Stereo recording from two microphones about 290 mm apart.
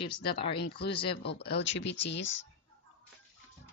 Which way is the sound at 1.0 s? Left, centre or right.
Left.